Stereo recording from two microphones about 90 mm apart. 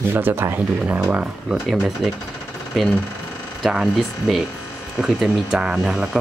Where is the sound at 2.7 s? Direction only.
5° left (ahead or behind).